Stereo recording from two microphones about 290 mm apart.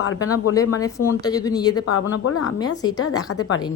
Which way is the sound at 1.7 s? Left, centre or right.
Left.